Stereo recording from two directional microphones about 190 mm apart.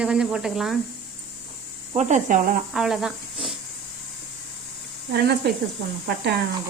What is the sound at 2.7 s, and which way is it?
Speech, centre (ahead or behind).